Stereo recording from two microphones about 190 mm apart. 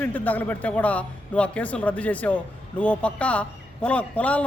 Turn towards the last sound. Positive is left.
turn(degrees=5)  # may be behind; listen again after turning